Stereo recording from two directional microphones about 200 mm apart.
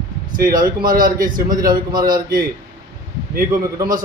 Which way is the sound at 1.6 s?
20° right (ahead or behind).